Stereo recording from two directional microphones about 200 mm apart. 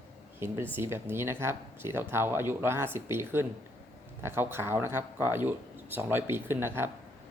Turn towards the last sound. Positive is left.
turn(degrees=-10)  # may be behind; listen again after turning